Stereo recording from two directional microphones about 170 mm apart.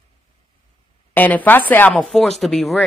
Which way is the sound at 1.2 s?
10° left (ahead or behind).